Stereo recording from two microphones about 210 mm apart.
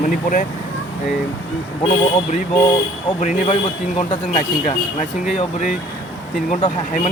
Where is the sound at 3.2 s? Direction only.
30° left (ahead or behind).